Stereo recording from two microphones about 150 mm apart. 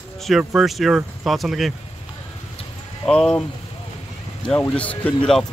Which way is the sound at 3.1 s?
5° left (ahead or behind).